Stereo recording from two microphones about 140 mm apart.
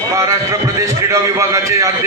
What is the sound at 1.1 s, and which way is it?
Speech, 20° right (ahead or behind).